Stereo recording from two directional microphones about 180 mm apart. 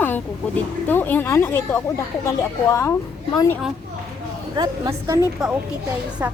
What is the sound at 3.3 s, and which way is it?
Speech, 20° left (ahead or behind).